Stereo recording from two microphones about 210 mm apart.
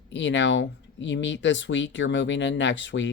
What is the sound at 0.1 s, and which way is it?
Speech, 60° left (ahead or behind).